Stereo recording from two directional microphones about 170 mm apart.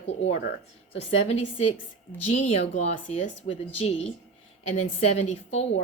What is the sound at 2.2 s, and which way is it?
Speech, 40° left (ahead or behind).